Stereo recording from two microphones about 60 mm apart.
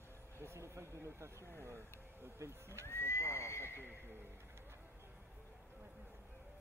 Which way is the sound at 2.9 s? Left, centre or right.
Left.